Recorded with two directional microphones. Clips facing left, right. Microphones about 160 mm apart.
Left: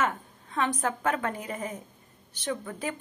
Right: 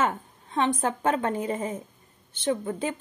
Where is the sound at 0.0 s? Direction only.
30° right (ahead or behind).